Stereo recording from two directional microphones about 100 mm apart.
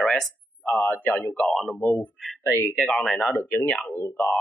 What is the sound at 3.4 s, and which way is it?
Speech, 25° left (ahead or behind).